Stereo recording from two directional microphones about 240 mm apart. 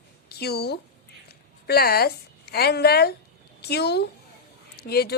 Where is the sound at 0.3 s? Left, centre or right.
Left.